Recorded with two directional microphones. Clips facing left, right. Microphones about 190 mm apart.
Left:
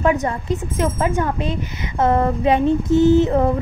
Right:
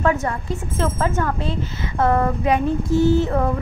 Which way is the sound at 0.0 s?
20° left (ahead or behind).